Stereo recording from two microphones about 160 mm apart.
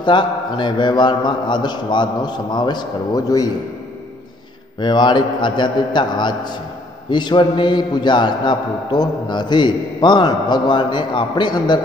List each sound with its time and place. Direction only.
0.0 s a man's voice: 30° left (ahead or behind)
4.7 s a man's voice: 25° left (ahead or behind)